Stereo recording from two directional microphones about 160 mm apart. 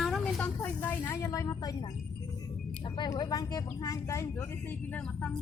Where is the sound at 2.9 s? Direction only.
25° left (ahead or behind); by 5.3 s 10° left (ahead or behind).